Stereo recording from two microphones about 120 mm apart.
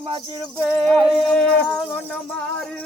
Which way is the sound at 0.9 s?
5° left (ahead or behind).